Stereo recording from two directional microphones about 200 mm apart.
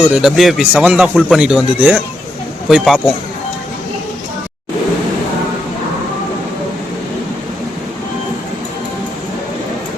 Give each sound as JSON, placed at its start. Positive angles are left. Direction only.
{"t": 0.0, "sound": "speech", "side_deg": -5}